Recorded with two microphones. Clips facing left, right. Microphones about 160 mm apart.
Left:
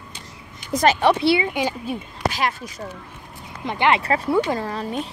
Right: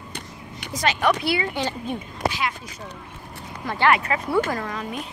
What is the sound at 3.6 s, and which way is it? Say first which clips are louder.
Speech: left 1 dB; 20° left (ahead or behind).